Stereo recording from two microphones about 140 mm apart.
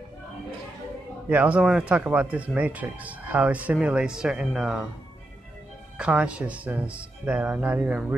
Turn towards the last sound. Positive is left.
turn(degrees=-10)  # may be behind; listen again after turning